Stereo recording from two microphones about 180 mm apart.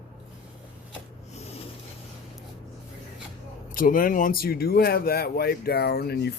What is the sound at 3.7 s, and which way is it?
Speech, 50° left (ahead or behind).